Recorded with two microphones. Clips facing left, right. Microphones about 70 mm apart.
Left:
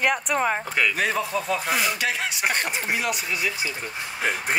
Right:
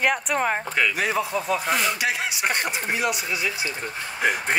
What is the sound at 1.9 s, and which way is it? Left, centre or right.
Speech, centre.